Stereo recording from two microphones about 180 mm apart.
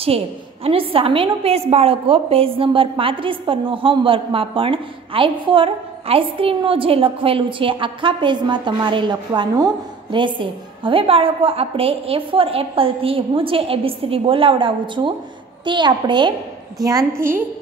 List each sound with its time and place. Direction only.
0.7 s a woman's voice: 30° right (ahead or behind); by 17.4 s 15° right (ahead or behind)